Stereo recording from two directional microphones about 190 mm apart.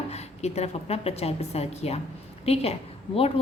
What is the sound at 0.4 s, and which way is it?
A woman's voice, 35° left (ahead or behind).